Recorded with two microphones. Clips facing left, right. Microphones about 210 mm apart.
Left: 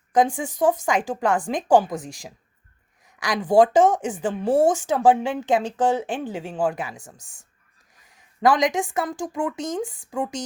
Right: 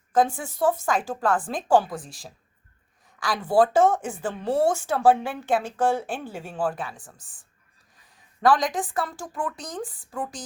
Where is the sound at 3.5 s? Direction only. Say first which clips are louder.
Left 3 dB; 20° left (ahead or behind).